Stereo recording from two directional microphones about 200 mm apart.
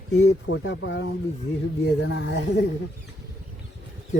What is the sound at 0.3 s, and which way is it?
Speech, 70° left (ahead or behind).